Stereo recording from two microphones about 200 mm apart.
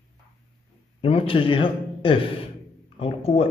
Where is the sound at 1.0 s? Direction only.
25° left (ahead or behind).